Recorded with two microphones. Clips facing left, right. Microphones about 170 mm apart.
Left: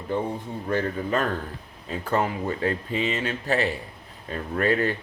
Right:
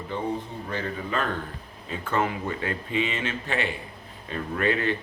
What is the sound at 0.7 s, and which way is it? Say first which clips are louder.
Speech: left 6 dB; 45° left (ahead or behind).